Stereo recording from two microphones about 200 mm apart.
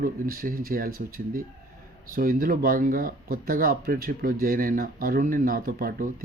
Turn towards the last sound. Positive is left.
turn(degrees=-45)  # may be behind; listen again after turning